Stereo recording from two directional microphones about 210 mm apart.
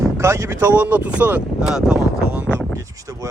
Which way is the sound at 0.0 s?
15° right (ahead or behind).